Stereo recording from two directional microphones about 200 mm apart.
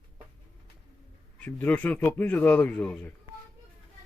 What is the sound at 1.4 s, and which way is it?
Speech, 10° left (ahead or behind).